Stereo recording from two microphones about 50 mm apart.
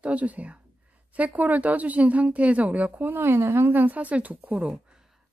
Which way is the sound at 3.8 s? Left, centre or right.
Right.